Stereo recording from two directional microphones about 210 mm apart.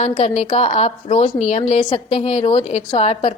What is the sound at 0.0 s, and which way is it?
A woman's voice, 30° left (ahead or behind).